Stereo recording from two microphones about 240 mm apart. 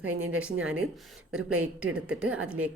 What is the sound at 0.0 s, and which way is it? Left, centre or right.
Speech, right.